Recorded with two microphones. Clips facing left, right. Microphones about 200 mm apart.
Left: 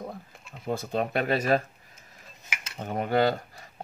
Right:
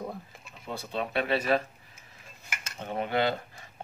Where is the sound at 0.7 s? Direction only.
45° left (ahead or behind).